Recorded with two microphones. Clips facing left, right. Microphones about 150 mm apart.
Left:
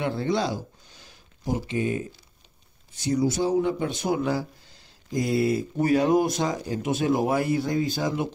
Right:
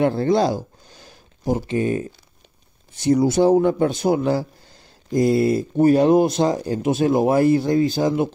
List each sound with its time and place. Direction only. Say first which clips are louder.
0.0 s speech: right 8 dB; 45° right (ahead or behind)
3.0 s speech: right 8 dB; 65° right (ahead or behind)
3.9 s speech: right 6 dB; 35° right (ahead or behind)
6.5 s speech: right 6 dB; 45° right (ahead or behind)
6.8 s speech: right 5 dB; 30° right (ahead or behind)